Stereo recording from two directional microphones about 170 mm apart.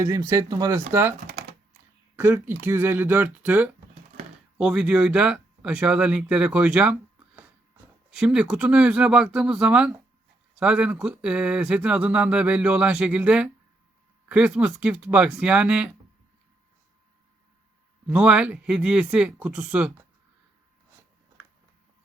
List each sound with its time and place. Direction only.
0.0 s speech: 20° right (ahead or behind)
2.1 s speech: 10° right (ahead or behind)
8.1 s speech: 5° right (ahead or behind)
18.1 s speech: 5° right (ahead or behind)